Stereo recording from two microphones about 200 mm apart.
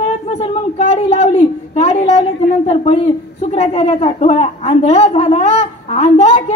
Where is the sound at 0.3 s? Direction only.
35° left (ahead or behind).